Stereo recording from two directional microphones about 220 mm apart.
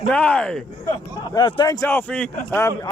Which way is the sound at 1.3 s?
20° left (ahead or behind).